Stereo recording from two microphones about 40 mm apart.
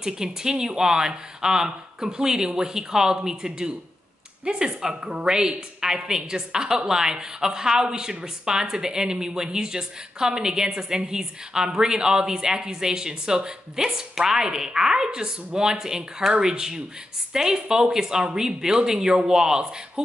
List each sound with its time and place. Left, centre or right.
0.0 s speech: centre